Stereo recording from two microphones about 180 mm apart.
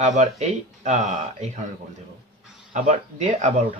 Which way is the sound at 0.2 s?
40° right (ahead or behind).